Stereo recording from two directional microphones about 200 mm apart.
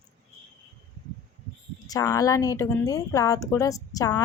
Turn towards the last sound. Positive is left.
turn(degrees=15)  # may be behind; listen again after turning